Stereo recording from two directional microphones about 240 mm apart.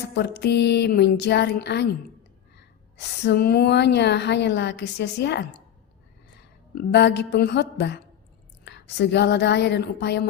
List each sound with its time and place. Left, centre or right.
0.1 s a woman's voice: left
6.9 s a woman's voice: left